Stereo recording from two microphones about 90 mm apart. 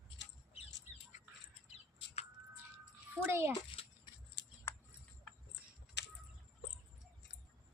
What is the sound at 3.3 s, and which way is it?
Speech, 30° right (ahead or behind).